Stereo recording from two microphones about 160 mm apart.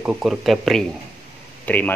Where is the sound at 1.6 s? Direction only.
10° left (ahead or behind).